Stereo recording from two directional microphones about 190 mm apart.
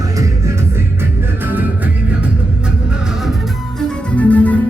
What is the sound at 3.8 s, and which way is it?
Music, 5° left (ahead or behind).